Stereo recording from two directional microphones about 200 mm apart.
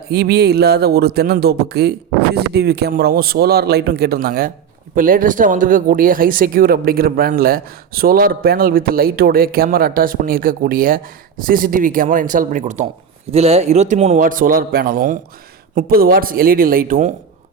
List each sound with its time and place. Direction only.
0.1 s speech: 50° right (ahead or behind)